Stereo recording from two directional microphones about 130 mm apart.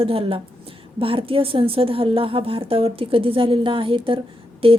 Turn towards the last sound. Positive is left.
turn(degrees=-45)  # may be behind; listen again after turning